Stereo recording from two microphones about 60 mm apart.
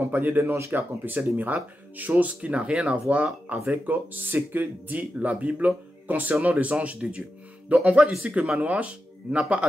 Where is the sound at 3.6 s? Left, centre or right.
Right.